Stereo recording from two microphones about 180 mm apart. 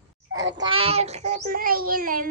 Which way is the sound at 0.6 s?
30° right (ahead or behind).